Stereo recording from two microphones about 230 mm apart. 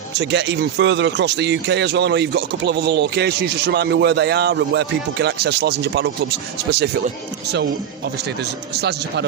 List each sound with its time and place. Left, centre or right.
0.2 s speech: right
8.7 s speech: right